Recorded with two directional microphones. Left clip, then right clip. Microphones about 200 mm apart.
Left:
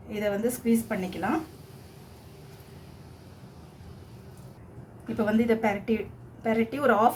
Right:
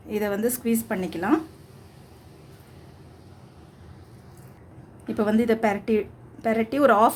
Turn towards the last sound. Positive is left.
turn(degrees=-45)  # may be behind; listen again after turning